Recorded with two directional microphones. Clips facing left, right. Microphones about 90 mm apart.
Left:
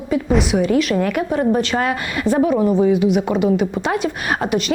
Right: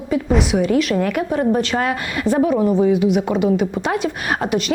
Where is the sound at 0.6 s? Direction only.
20° left (ahead or behind).